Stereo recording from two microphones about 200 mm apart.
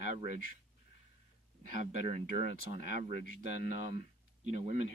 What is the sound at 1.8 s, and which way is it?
Speech, 35° right (ahead or behind).